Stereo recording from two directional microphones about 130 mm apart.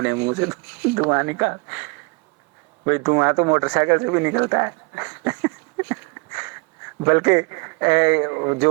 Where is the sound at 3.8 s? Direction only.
20° right (ahead or behind).